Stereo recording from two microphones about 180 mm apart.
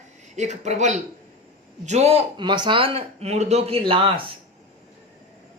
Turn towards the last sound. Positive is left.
turn(degrees=-30)  # may be behind; listen again after turning